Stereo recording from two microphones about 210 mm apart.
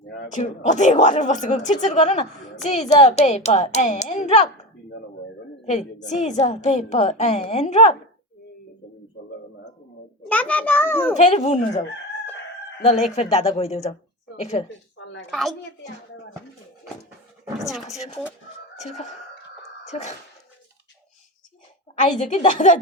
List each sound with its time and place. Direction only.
0.0 s a sound: 55° left (ahead or behind)
0.3 s a woman's voice: 35° left (ahead or behind)
5.6 s a woman's voice: 35° left (ahead or behind)
10.2 s a child's voice: 5° left (ahead or behind)
11.2 s a woman's voice: 35° left (ahead or behind)
14.9 s a sound: 60° left (ahead or behind)
15.3 s a woman's voice: centre (ahead or behind)
17.6 s a woman's voice: centre (ahead or behind)
19.9 s a woman's voice: 30° left (ahead or behind)
22.0 s a woman's voice: 35° left (ahead or behind)